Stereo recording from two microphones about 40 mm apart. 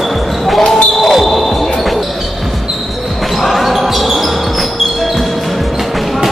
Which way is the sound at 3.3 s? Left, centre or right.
Centre.